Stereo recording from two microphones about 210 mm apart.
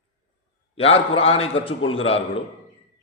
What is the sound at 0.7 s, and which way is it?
A man's voice, 25° left (ahead or behind).